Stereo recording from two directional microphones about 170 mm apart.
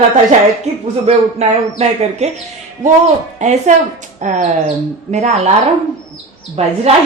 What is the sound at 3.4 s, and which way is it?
A woman's voice, 45° right (ahead or behind).